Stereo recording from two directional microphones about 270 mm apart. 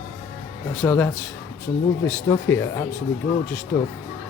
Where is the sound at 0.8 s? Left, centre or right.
Centre.